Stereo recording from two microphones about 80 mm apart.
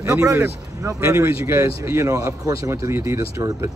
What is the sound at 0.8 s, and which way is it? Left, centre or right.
A man's voice, right.